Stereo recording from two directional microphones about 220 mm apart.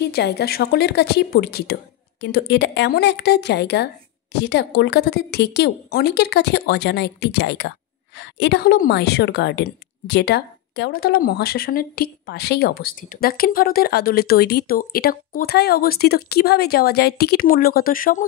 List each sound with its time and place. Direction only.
0.0 s a woman's voice: 45° left (ahead or behind)